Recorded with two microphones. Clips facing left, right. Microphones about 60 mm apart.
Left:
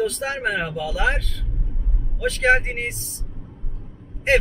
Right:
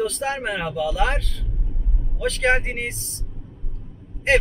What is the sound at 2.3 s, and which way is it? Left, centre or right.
Speech, centre.